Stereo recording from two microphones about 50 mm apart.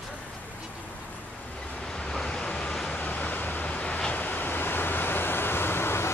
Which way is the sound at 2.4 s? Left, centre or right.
Left.